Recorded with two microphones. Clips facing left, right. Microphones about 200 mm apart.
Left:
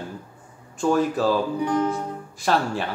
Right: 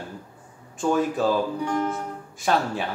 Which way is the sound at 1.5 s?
15° left (ahead or behind).